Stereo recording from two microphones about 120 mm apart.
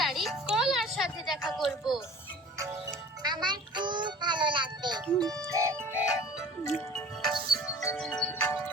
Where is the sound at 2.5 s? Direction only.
25° right (ahead or behind).